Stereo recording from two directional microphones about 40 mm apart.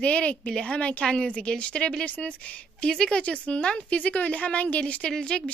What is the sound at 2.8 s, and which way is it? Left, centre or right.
Speech, left.